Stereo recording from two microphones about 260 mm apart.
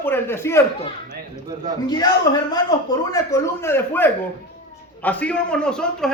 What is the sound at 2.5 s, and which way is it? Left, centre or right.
A man's voice, centre.